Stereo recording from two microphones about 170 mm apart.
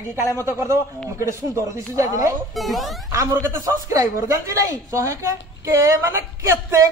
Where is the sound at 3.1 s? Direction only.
15° right (ahead or behind).